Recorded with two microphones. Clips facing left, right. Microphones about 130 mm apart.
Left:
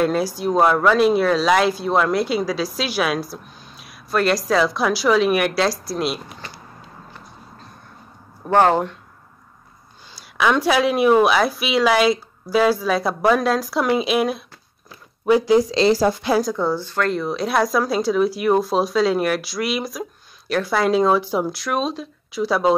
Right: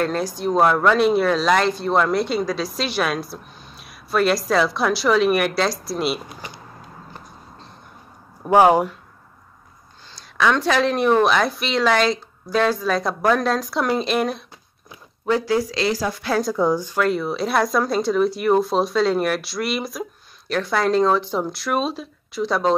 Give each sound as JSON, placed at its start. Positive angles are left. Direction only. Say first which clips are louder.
{"t": 0.0, "sound": "speech", "louder": "left 3 dB", "side_deg": 5}
{"t": 8.5, "sound": "speech", "louder": "right 2 dB", "side_deg": -10}
{"t": 10.1, "sound": "speech", "louder": "left 1 dB", "side_deg": 10}
{"t": 15.2, "sound": "speech", "louder": "left 5 dB", "side_deg": 15}
{"t": 16.5, "sound": "speech", "louder": "right 2 dB", "side_deg": -15}